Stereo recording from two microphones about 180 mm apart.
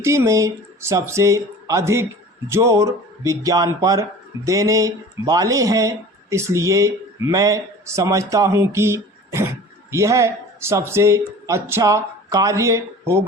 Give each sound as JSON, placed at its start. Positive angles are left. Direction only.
{"t": 0.0, "sound": "speech", "side_deg": -15}